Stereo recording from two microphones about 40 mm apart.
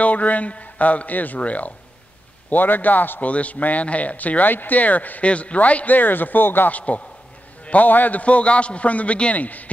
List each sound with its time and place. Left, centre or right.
0.0 s speech: left
2.5 s a man's voice: left
3.3 s speech: left
5.2 s speech: left
5.9 s speech: left
6.7 s a man's voice: left
8.2 s speech: left